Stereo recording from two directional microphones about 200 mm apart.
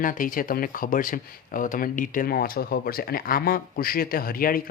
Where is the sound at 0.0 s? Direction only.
45° left (ahead or behind).